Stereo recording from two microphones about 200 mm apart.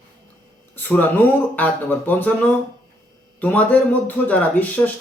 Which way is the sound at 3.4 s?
10° left (ahead or behind).